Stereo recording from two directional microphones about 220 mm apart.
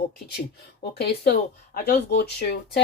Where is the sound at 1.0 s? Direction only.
45° left (ahead or behind).